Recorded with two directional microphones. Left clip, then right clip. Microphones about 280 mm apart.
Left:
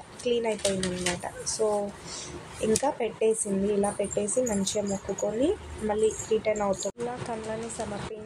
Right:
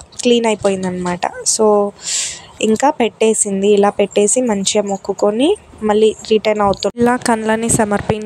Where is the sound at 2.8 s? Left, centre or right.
Right.